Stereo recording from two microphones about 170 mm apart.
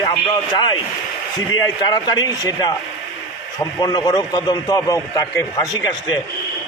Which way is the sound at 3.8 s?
25° left (ahead or behind).